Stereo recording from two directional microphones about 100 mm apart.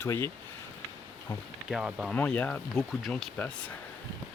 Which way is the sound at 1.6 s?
5° right (ahead or behind).